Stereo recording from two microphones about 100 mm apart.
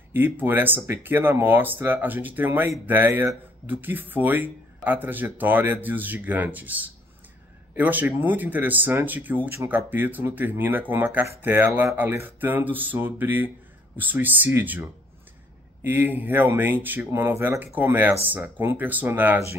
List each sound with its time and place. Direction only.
0.1 s speech: 20° right (ahead or behind)